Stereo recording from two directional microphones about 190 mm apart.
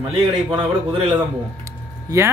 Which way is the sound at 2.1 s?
20° right (ahead or behind).